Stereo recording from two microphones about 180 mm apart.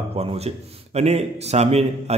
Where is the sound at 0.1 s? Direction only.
35° right (ahead or behind).